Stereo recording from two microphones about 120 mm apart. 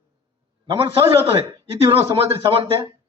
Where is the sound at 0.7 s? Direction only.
45° right (ahead or behind).